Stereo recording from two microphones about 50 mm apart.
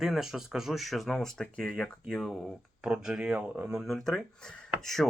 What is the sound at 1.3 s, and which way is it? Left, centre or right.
Speech, centre.